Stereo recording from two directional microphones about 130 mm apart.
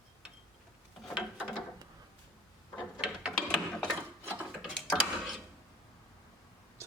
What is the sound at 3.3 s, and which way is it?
Mechanisms, 5° left (ahead or behind).